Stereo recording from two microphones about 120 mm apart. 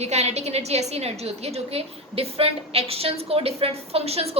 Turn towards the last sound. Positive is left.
turn(degrees=-60)  # may be behind; listen again after turning